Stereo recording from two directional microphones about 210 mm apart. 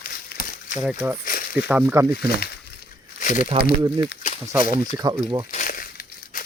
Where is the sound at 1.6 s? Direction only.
10° right (ahead or behind).